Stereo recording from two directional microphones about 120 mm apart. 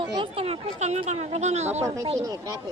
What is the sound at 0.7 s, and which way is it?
Speech, 70° right (ahead or behind).